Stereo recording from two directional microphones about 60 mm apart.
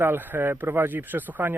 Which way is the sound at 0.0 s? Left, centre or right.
Right.